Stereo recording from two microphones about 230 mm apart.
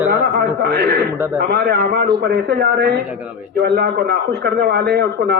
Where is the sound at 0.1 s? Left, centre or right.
Right.